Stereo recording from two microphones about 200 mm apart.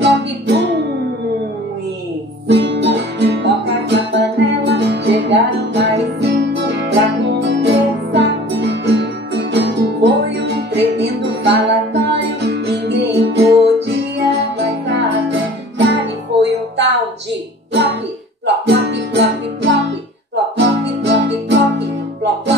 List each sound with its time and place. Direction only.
0.0 s music: 60° right (ahead or behind)
2.4 s music: 60° right (ahead or behind)
18.4 s music: 60° right (ahead or behind)